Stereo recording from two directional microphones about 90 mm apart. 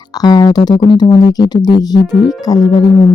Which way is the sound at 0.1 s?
45° left (ahead or behind).